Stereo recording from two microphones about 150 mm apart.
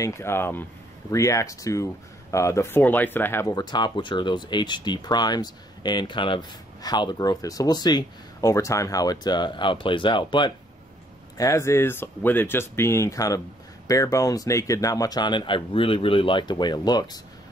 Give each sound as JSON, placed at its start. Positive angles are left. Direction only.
{"t": 0.0, "sound": "speech", "side_deg": 15}
{"t": 11.3, "sound": "speech", "side_deg": 20}